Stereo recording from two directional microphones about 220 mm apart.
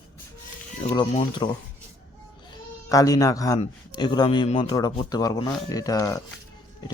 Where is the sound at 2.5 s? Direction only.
15° left (ahead or behind).